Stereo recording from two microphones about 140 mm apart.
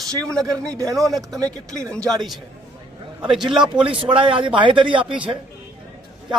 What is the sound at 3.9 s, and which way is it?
A man's voice, 35° right (ahead or behind).